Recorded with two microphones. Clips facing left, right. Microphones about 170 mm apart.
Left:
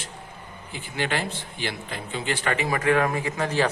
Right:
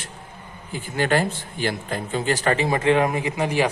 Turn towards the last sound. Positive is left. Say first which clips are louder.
# right 3 dB
turn(degrees=-15)  # may be behind; listen again after turning